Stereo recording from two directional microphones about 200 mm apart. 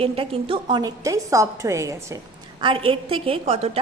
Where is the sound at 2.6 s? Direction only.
25° right (ahead or behind).